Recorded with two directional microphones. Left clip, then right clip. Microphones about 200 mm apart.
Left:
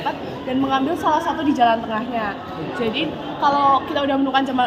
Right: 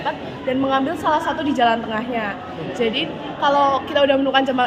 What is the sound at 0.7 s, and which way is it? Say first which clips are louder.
A man's voice: left 1 dB; 45° right (ahead or behind).